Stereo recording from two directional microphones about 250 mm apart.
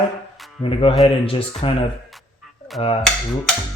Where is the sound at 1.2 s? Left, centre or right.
Left.